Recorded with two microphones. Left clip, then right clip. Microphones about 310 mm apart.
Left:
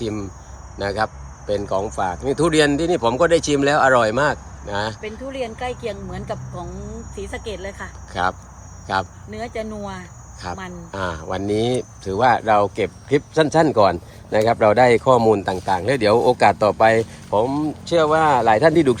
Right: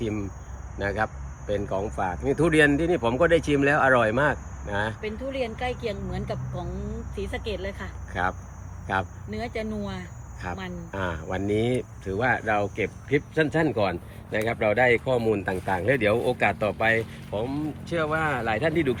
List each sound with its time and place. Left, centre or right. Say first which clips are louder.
0.0 s speech: left 4 dB; centre
5.0 s speech: left 2 dB; left
8.1 s speech: left 6 dB; centre
9.3 s speech: left 3 dB; left
10.5 s speech: left 4 dB; centre
13.4 s speech: left 11 dB; left
15.3 s speech: left 7 dB; centre
16.8 s speech: left 7 dB; left
17.9 s speech: left 11 dB; centre
18.5 s speech: left 10 dB; left